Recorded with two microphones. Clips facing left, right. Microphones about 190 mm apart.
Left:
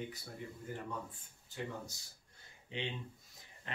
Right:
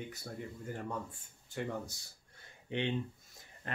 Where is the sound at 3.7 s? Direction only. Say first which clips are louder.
Right 4 dB; 50° right (ahead or behind).